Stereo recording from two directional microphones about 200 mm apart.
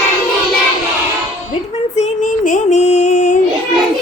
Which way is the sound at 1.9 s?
40° left (ahead or behind).